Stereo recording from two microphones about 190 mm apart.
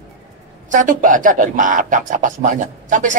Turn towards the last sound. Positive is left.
turn(degrees=-40)  # may be behind; listen again after turning